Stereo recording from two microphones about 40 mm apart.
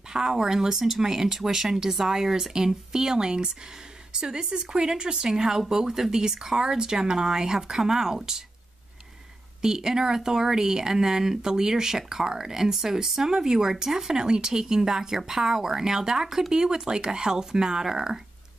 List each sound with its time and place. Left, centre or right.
0.1 s a woman's voice: centre
9.6 s speech: centre